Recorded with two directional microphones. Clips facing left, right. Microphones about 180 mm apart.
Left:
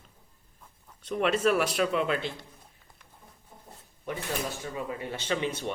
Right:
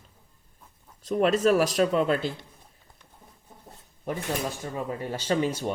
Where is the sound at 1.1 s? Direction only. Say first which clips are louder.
Right 4 dB; 40° right (ahead or behind).